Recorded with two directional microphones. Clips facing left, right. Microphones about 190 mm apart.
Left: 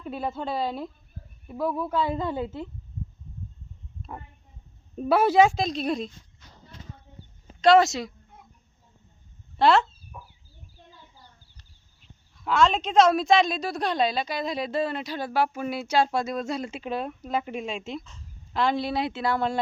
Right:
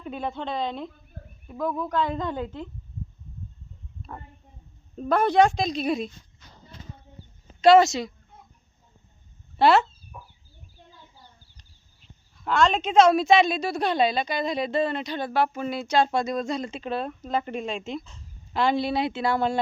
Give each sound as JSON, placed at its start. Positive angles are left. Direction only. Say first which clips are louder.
{"t": 0.0, "sound": "a woman's voice", "louder": "even", "side_deg": 5}
{"t": 4.9, "sound": "a woman's voice", "louder": "left 1 dB", "side_deg": 5}
{"t": 7.6, "sound": "a woman's voice", "louder": "right 2 dB", "side_deg": 0}
{"t": 9.6, "sound": "chicken", "louder": "right 1 dB", "side_deg": -5}
{"t": 12.5, "sound": "a woman's voice", "louder": "even", "side_deg": 0}